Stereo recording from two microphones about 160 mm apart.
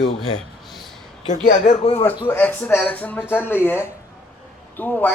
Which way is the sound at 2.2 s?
10° left (ahead or behind).